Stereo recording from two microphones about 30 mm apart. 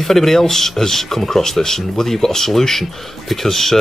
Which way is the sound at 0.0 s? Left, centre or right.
Centre.